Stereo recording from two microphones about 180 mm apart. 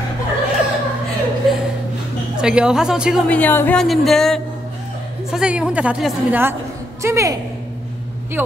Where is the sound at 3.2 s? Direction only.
10° left (ahead or behind).